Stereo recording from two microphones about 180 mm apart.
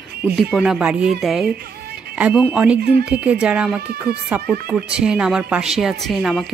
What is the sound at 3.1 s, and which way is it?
Speech, 5° right (ahead or behind).